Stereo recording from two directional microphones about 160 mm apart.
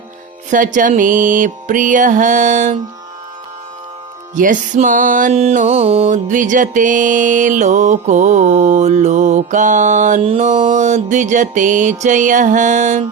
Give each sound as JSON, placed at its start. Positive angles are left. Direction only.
{"t": 0.5, "sound": "music", "side_deg": -55}
{"t": 4.4, "sound": "music", "side_deg": -55}
{"t": 5.3, "sound": "music", "side_deg": -40}
{"t": 6.1, "sound": "music", "side_deg": -50}